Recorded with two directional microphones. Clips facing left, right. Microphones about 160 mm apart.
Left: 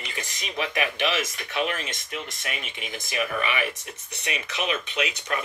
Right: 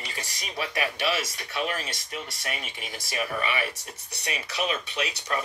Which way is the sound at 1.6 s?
35° right (ahead or behind).